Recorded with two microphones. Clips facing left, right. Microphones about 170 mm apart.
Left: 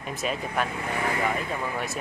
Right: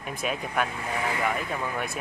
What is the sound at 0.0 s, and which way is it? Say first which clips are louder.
Speech: left 1 dB; centre (ahead or behind).